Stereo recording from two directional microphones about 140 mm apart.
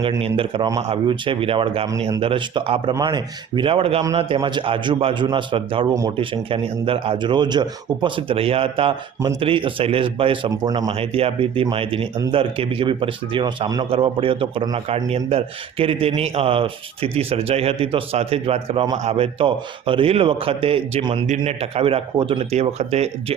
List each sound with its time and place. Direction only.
0.2 s a man's voice: 40° right (ahead or behind)
10.9 s a man's voice: 40° right (ahead or behind)